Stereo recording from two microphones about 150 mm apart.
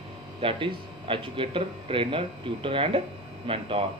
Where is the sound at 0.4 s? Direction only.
35° right (ahead or behind).